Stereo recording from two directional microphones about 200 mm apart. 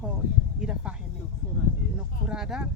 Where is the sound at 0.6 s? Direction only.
5° right (ahead or behind).